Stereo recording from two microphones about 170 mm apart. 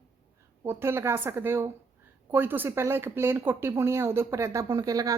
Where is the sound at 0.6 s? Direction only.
15° right (ahead or behind).